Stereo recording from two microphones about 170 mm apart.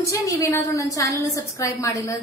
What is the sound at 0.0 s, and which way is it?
A woman's voice, 20° left (ahead or behind).